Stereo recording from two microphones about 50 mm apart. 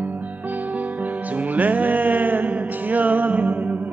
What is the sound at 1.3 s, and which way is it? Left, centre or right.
Music, right.